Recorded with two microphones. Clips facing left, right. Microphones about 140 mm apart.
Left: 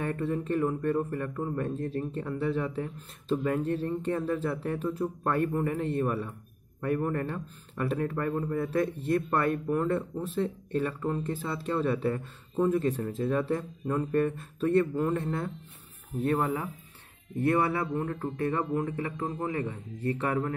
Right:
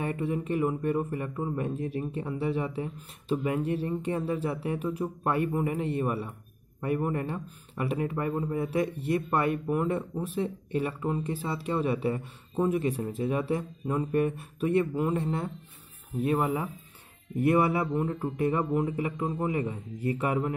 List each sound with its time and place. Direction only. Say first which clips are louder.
0.0 s speech: even; 10° right (ahead or behind)